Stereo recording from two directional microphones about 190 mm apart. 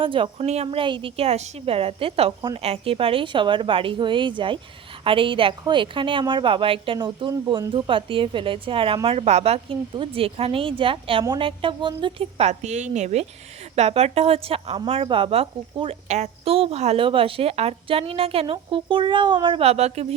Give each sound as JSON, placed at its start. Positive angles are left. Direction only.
{"t": 0.0, "sound": "a woman's voice", "side_deg": -25}